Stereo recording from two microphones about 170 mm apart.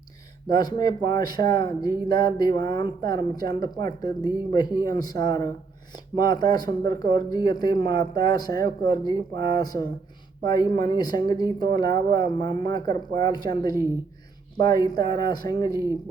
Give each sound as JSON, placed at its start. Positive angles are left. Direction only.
{"t": 0.4, "sound": "speech", "side_deg": 25}